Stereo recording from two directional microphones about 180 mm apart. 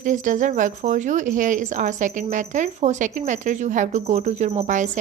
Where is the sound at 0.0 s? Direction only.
45° right (ahead or behind).